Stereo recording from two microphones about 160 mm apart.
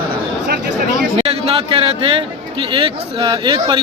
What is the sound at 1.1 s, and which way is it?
A man's voice, 35° right (ahead or behind).